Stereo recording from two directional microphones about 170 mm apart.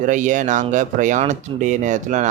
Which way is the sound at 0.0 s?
50° right (ahead or behind).